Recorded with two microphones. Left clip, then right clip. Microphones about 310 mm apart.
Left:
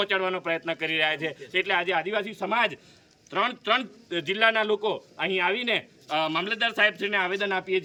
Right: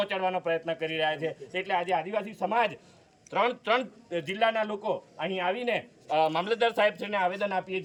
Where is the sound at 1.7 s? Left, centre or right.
Centre.